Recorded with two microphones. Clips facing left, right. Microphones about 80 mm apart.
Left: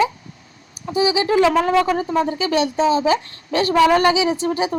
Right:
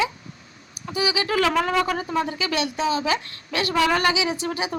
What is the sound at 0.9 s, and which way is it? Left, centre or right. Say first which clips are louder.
A woman's voice: left 6 dB; left.